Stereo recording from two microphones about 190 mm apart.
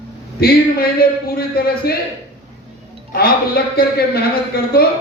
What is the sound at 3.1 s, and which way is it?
A man's voice, 55° left (ahead or behind).